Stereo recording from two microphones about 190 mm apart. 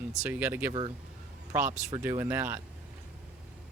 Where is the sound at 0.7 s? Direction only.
25° right (ahead or behind).